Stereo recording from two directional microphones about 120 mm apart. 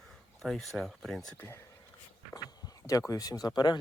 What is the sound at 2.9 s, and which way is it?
Speech, 30° left (ahead or behind).